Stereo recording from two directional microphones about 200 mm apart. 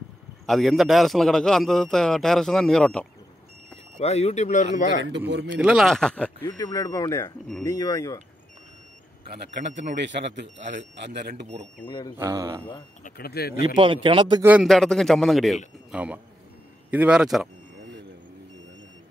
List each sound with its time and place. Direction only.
0.5 s a man's voice: centre (ahead or behind)
3.7 s speech: 30° left (ahead or behind)
5.3 s speech: 60° right (ahead or behind)
5.6 s a man's voice: centre (ahead or behind)
6.4 s speech: 20° left (ahead or behind)
9.9 s speech: 60° right (ahead or behind)
11.8 s speech: 20° left (ahead or behind)
12.2 s speech: 15° right (ahead or behind)
13.0 s speech: 50° left (ahead or behind)
13.7 s a man's voice: 25° right (ahead or behind)
14.4 s a man's voice: 5° right (ahead or behind)